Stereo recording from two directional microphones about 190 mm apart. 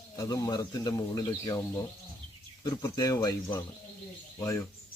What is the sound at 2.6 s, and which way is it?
Speech, 20° left (ahead or behind).